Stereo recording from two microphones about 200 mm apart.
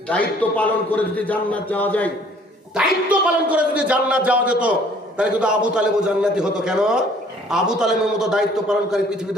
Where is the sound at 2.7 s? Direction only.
5° right (ahead or behind).